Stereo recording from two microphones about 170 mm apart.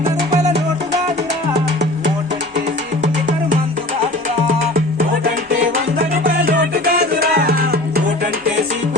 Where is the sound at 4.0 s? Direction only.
45° right (ahead or behind).